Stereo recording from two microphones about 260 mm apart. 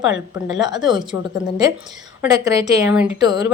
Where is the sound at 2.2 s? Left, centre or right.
Centre.